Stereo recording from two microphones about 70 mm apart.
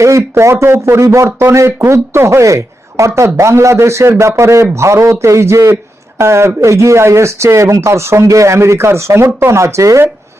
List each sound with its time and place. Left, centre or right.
0.0 s speech: right
1.0 s speech: right
1.4 s speech: right